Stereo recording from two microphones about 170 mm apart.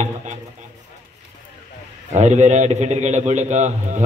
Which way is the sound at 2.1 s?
45° right (ahead or behind).